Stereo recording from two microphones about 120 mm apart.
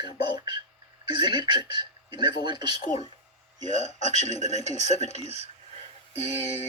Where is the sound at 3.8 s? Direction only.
65° left (ahead or behind).